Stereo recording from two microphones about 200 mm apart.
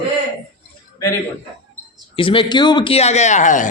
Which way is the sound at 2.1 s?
25° left (ahead or behind).